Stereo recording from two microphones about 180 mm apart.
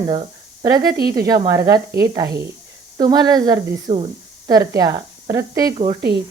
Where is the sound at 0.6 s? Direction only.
20° right (ahead or behind).